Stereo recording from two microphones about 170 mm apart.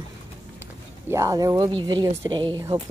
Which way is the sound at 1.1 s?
20° right (ahead or behind).